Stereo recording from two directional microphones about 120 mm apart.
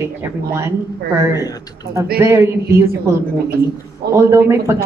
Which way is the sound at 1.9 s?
25° right (ahead or behind).